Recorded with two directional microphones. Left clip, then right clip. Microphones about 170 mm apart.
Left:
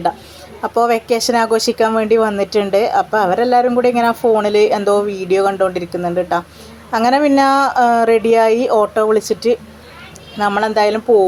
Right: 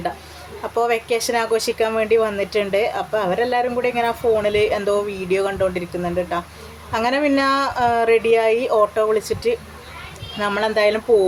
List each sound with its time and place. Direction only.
0.7 s a woman's voice: 25° left (ahead or behind)